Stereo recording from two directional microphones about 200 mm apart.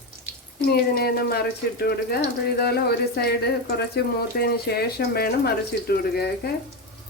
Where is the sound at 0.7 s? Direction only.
50° left (ahead or behind).